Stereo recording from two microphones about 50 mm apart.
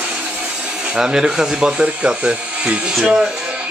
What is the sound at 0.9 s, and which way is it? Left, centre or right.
Speech, centre.